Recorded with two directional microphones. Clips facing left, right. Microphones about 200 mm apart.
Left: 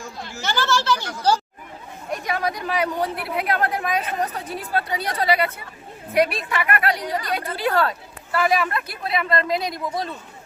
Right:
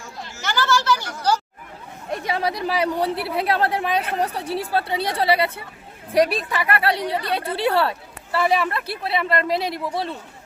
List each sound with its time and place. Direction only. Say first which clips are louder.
0.0 s speech: left 2 dB; 30° left (ahead or behind)
2.0 s a woman's voice: right 1 dB; 25° right (ahead or behind)